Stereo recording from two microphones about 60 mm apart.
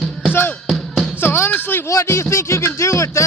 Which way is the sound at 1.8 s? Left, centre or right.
Left.